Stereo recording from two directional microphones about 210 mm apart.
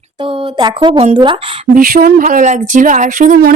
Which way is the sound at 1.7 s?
40° right (ahead or behind).